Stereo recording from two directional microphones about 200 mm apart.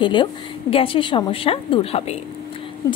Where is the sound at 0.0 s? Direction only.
25° left (ahead or behind).